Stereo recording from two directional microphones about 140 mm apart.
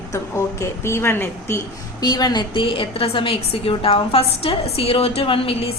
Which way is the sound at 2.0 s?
30° left (ahead or behind).